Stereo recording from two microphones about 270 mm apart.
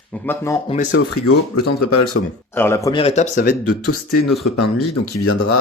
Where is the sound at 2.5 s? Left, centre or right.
Centre; by 3.7 s left.